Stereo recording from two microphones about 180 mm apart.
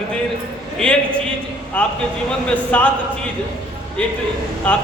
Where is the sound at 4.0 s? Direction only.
5° left (ahead or behind).